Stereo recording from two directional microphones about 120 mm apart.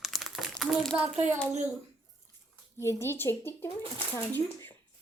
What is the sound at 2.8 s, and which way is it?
Speech, 20° left (ahead or behind).